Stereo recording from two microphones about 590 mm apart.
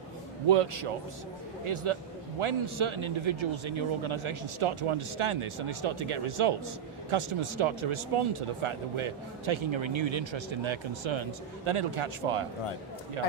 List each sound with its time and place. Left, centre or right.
0.4 s a man's voice: right